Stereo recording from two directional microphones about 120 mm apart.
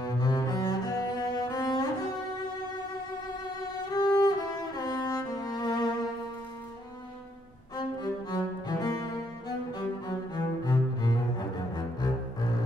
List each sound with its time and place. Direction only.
0.0 s cello: 35° left (ahead or behind)
3.9 s music: 30° left (ahead or behind)
7.7 s music: 35° left (ahead or behind)
9.7 s cello: 35° left (ahead or behind)